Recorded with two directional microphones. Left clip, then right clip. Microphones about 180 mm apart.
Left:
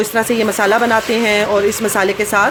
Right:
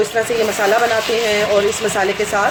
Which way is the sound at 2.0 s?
40° left (ahead or behind).